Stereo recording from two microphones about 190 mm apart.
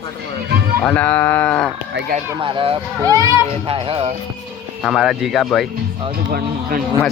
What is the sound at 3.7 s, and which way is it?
Speech, 30° right (ahead or behind).